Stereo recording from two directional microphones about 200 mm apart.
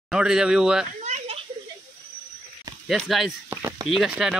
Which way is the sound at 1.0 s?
30° right (ahead or behind).